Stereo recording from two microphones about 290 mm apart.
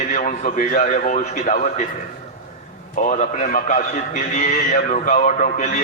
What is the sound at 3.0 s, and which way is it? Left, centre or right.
A man's voice, left.